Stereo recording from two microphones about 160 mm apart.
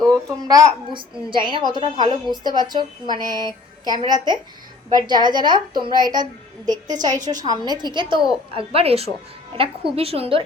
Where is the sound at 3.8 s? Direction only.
25° right (ahead or behind).